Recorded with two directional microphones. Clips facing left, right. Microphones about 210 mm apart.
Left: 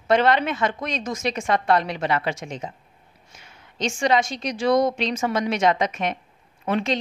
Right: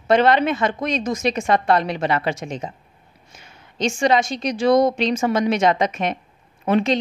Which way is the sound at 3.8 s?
25° right (ahead or behind).